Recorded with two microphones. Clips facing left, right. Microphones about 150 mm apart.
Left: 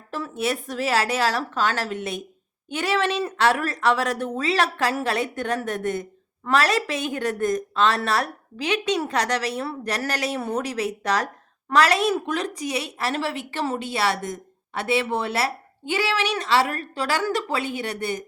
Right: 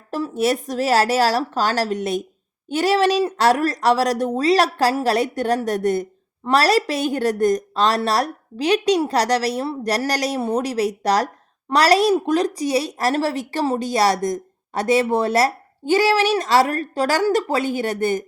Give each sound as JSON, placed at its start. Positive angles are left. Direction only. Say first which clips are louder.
{"t": 0.1, "sound": "a woman's voice", "louder": "right 6 dB", "side_deg": -40}